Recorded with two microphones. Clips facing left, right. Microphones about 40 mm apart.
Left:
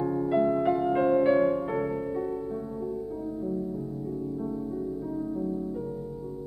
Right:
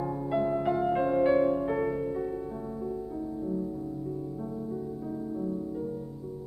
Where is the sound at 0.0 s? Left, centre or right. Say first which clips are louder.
Left 4 dB; centre.